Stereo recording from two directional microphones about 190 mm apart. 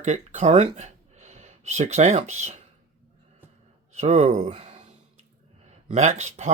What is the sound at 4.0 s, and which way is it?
Speech, 35° right (ahead or behind).